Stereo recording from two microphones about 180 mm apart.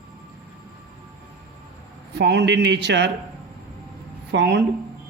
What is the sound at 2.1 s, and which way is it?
Speech, 70° right (ahead or behind).